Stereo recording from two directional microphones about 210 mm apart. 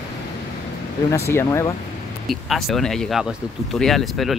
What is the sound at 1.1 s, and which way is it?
Speech, 15° left (ahead or behind).